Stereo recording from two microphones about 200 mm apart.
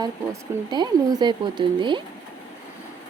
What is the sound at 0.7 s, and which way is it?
Speech, 20° right (ahead or behind).